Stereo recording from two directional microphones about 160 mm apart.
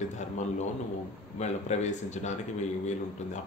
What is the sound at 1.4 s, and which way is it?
Speech, 45° left (ahead or behind).